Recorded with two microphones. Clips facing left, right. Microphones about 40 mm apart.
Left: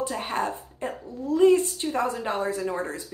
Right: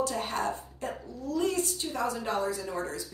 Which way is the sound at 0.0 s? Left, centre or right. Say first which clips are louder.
Left 2 dB; left.